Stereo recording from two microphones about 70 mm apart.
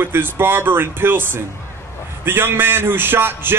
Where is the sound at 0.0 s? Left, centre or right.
Right.